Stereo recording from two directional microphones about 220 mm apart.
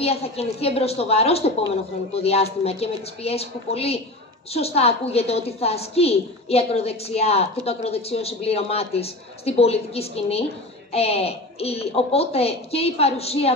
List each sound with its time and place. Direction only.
0.0 s a woman's voice: 25° left (ahead or behind)